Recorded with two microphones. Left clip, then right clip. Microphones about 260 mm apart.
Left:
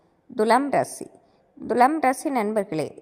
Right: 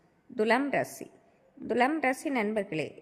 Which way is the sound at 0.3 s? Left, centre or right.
Centre.